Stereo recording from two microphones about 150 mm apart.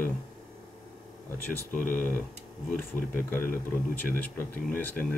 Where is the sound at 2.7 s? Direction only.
15° left (ahead or behind).